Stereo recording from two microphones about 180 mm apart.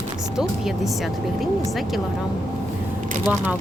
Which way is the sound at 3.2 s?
5° right (ahead or behind).